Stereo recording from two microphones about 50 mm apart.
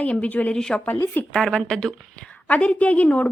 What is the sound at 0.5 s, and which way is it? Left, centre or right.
A woman's voice, centre.